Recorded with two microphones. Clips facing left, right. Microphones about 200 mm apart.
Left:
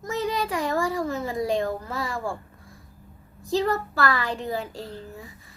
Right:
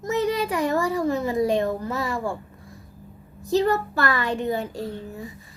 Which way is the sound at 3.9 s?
20° right (ahead or behind).